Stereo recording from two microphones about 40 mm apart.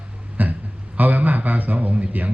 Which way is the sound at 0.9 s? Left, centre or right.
Right.